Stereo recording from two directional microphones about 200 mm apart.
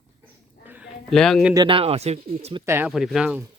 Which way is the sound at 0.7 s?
5° right (ahead or behind).